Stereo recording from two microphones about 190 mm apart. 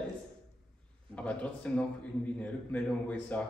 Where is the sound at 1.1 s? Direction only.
5° left (ahead or behind).